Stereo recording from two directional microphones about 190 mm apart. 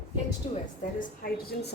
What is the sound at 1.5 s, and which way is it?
Speech, 55° left (ahead or behind).